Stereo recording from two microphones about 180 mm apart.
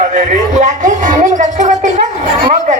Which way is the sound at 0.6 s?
45° right (ahead or behind).